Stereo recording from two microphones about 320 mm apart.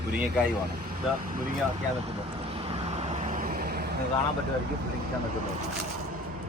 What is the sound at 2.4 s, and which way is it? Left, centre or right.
Vehicle, centre.